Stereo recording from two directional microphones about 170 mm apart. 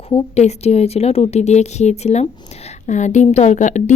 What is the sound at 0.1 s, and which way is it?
Speech, 40° left (ahead or behind).